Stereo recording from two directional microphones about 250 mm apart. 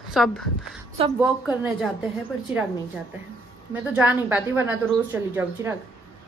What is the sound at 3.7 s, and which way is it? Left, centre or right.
A woman's voice, centre.